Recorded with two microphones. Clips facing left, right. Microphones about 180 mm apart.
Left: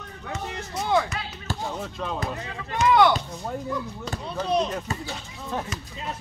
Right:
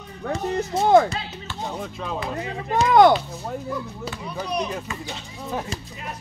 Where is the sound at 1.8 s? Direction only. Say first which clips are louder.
Right 1 dB; centre (ahead or behind).